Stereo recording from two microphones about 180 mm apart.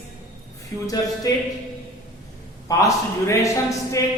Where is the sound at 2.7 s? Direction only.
20° left (ahead or behind).